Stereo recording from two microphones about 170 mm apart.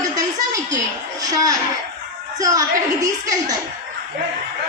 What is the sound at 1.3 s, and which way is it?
A woman's voice, 20° right (ahead or behind).